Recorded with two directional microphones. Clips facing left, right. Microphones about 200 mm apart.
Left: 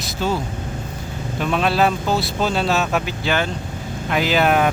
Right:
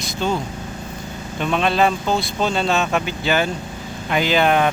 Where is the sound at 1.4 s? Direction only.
5° left (ahead or behind).